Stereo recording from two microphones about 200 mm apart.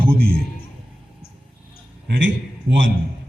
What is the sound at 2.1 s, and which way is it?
Speech, 65° right (ahead or behind).